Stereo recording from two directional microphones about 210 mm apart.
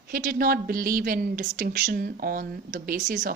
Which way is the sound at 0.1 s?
45° right (ahead or behind).